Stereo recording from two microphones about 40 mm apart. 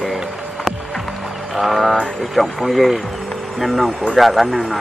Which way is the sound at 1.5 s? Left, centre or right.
Centre.